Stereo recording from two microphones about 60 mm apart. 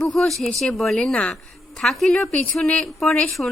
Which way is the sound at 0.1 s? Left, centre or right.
Centre.